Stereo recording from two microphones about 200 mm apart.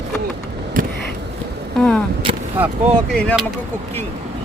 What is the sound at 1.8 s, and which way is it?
Speech, 5° left (ahead or behind).